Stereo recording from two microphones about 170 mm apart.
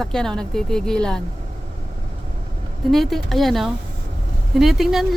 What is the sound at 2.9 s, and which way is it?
Speech, centre (ahead or behind).